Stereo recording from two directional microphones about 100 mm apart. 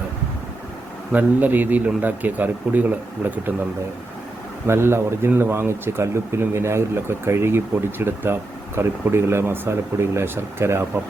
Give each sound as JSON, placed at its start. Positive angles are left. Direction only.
{"t": 1.1, "sound": "speech", "side_deg": -20}
{"t": 4.6, "sound": "speech", "side_deg": -25}